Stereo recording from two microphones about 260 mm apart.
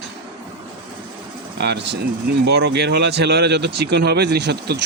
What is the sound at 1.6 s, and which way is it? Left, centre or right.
Speech, right.